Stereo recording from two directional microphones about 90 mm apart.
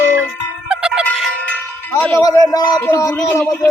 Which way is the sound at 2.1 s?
40° left (ahead or behind).